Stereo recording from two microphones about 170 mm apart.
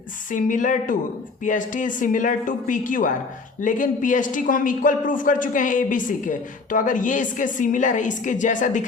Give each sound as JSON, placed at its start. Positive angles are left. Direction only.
{"t": 0.3, "sound": "a man's voice", "side_deg": 50}